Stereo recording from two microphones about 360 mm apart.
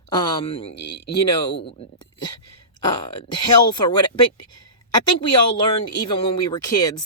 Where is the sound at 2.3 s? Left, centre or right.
Left.